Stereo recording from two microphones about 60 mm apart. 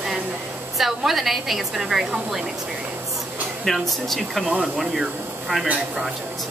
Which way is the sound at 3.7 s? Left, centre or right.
Centre.